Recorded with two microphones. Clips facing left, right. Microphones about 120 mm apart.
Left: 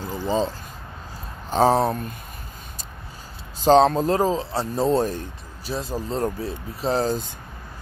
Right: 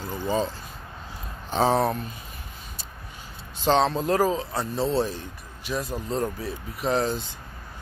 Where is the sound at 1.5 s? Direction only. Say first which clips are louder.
Left 3 dB; 40° left (ahead or behind).